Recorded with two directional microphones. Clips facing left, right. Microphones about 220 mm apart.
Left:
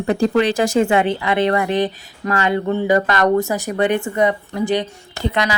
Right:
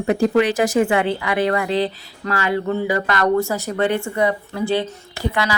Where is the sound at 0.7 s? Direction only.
20° left (ahead or behind).